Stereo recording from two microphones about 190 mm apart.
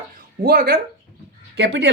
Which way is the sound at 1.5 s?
60° right (ahead or behind).